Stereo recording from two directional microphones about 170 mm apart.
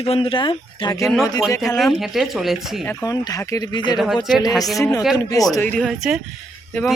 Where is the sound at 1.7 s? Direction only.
Centre (ahead or behind).